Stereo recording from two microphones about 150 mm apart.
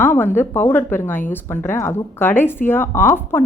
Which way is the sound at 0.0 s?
15° left (ahead or behind).